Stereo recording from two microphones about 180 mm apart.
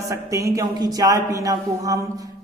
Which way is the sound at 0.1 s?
15° right (ahead or behind).